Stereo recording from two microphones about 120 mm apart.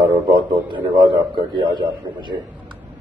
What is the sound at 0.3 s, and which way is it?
A man's voice, 40° right (ahead or behind).